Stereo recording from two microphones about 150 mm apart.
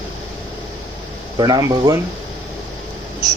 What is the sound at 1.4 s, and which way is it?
Speech, 25° right (ahead or behind).